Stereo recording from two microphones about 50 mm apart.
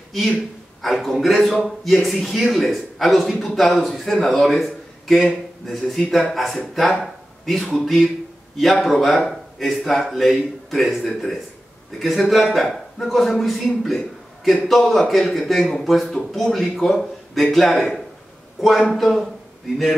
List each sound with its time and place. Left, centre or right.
0.8 s a man's voice: centre